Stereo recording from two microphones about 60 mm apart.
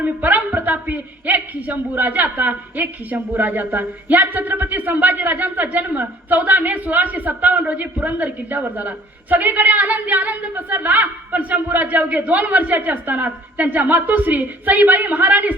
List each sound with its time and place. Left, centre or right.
0.0 s a man's voice: right